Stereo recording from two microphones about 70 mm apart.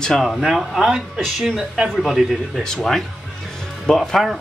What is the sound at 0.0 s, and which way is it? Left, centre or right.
A man's voice, centre.